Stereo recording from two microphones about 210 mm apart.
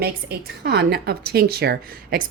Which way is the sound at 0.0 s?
50° right (ahead or behind).